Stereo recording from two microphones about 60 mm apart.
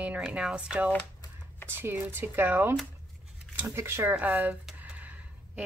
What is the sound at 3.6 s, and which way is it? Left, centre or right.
Speech, right.